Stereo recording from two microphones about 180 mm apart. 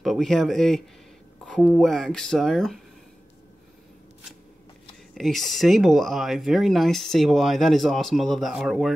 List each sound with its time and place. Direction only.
0.0 s speech: centre (ahead or behind)
5.1 s speech: centre (ahead or behind)